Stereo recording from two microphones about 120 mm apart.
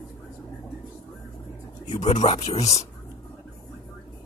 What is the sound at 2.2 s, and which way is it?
Speech, 65° left (ahead or behind).